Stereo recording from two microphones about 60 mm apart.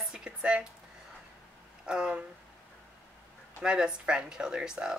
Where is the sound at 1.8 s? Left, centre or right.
Centre.